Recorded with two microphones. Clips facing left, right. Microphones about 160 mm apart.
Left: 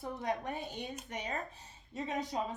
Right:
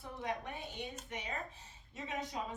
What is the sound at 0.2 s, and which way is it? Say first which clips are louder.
A woman's voice: left 2 dB; 40° left (ahead or behind).